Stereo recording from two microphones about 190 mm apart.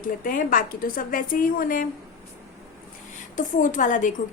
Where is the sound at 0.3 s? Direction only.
45° left (ahead or behind).